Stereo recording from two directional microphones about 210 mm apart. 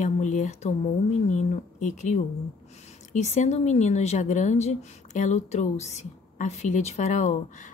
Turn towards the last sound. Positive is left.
turn(degrees=35)  # may be behind; listen again after turning